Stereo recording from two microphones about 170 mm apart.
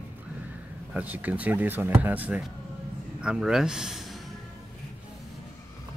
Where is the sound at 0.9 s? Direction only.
10° right (ahead or behind).